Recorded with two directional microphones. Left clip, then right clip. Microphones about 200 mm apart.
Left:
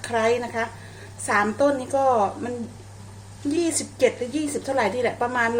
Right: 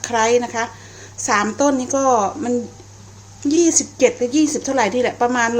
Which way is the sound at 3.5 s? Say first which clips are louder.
Right 9 dB; 40° right (ahead or behind).